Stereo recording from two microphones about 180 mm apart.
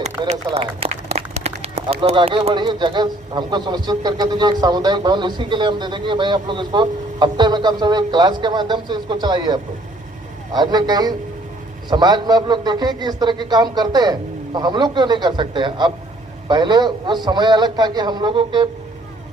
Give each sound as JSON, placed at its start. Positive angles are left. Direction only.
{"t": 0.4, "sound": "speech", "side_deg": -30}